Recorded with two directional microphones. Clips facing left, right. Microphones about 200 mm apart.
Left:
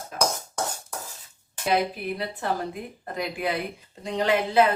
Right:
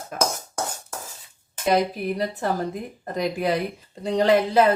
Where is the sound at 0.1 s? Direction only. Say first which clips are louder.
Right 1 dB; 50° right (ahead or behind).